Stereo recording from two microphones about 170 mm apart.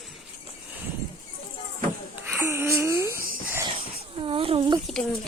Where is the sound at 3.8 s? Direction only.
35° right (ahead or behind).